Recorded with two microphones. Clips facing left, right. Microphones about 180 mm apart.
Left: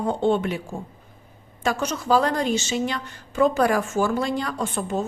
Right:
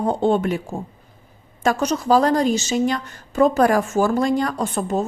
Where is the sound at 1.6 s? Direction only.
40° right (ahead or behind).